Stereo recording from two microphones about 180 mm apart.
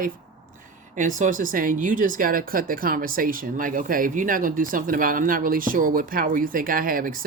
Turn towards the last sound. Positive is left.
turn(degrees=-50)  # may be behind; listen again after turning